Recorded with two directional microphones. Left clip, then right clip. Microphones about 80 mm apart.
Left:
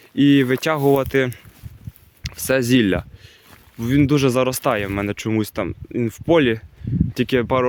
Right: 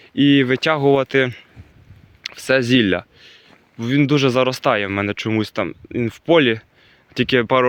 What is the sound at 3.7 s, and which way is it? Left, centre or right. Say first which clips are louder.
Speech: right 1 dB; left.